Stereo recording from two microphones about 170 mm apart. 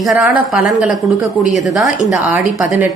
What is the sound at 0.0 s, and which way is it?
A woman's voice, 5° right (ahead or behind).